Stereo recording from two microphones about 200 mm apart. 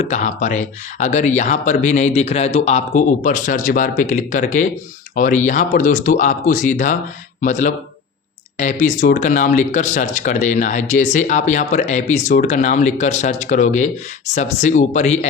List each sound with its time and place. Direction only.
0.0 s speech: 35° left (ahead or behind)